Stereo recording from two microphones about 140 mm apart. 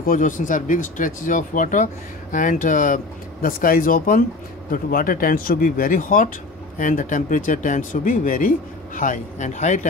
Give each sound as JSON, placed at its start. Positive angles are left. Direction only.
{"t": 0.0, "sound": "speech", "side_deg": 70}
{"t": 3.4, "sound": "speech", "side_deg": 90}